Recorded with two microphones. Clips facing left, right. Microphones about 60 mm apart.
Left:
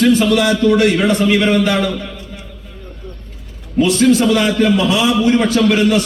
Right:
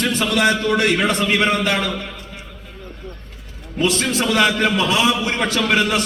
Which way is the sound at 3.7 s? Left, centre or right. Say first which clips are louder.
Left 8 dB; right.